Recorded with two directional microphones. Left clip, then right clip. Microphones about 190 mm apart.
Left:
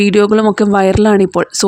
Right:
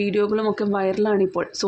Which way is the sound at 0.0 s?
55° left (ahead or behind).